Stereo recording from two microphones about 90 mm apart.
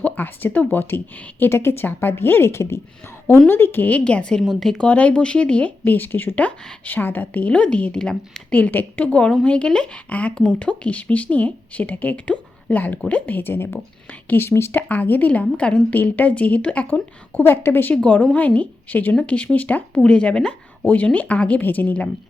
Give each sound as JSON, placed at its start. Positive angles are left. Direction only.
{"t": 0.0, "sound": "speech", "side_deg": 20}
{"t": 4.3, "sound": "a woman's voice", "side_deg": 5}
{"t": 4.9, "sound": "a woman's voice", "side_deg": 15}